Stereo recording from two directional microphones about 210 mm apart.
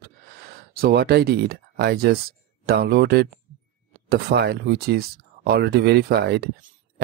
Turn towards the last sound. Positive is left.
turn(degrees=-50)  # may be behind; listen again after turning